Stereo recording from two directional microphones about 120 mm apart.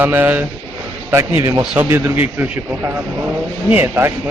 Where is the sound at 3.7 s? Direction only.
20° right (ahead or behind).